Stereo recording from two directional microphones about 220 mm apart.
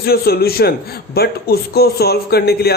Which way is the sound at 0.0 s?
45° left (ahead or behind).